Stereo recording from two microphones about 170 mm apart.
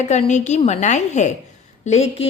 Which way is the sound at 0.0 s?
45° left (ahead or behind).